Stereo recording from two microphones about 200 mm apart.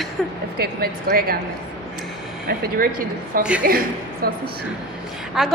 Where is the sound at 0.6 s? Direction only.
50° right (ahead or behind).